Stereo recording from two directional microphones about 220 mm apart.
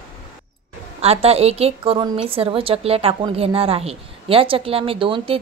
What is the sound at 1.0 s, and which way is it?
A woman's voice, 25° right (ahead or behind).